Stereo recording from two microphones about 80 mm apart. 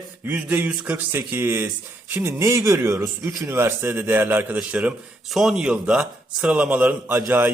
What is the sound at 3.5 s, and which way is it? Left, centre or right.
A man's voice, right.